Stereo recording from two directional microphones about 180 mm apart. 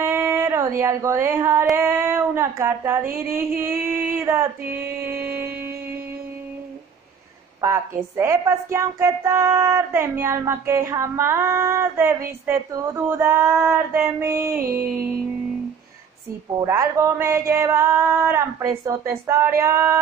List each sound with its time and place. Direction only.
0.0 s speech: 15° right (ahead or behind)
7.6 s speech: 15° right (ahead or behind)
16.6 s speech: 15° right (ahead or behind)